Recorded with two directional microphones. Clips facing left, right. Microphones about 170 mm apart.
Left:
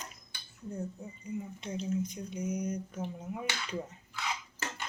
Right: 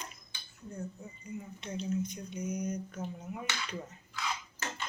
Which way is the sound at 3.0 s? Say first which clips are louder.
Left 2 dB; 30° left (ahead or behind).